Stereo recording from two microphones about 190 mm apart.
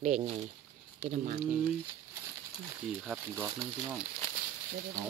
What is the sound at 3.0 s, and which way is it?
Speech, 10° right (ahead or behind).